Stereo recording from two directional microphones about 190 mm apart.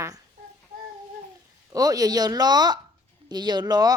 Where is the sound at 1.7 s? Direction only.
20° right (ahead or behind).